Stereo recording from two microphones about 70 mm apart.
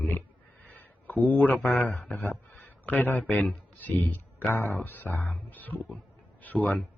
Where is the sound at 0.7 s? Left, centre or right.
Left.